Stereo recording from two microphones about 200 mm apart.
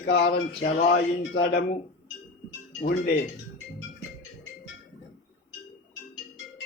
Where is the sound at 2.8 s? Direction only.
45° left (ahead or behind).